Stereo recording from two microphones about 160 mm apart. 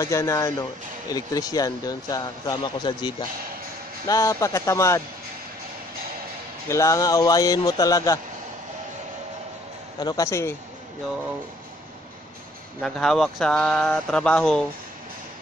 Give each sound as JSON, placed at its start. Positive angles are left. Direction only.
{"t": 0.0, "sound": "speech", "side_deg": 20}
{"t": 4.1, "sound": "speech", "side_deg": 20}
{"t": 6.7, "sound": "speech", "side_deg": 20}
{"t": 9.9, "sound": "speech", "side_deg": 20}
{"t": 12.8, "sound": "speech", "side_deg": 5}